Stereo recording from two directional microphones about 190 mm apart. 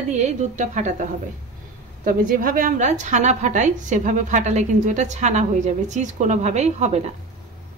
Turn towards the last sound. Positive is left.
turn(degrees=-35)  # may be behind; listen again after turning